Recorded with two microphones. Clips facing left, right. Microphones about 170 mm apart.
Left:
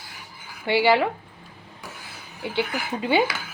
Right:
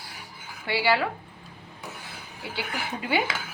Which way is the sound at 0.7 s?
20° left (ahead or behind).